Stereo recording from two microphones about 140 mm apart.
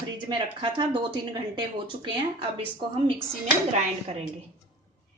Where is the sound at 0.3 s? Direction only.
35° right (ahead or behind).